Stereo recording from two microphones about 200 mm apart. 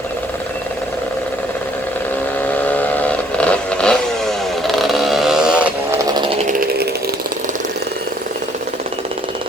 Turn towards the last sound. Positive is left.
turn(degrees=-45)  # may be behind; listen again after turning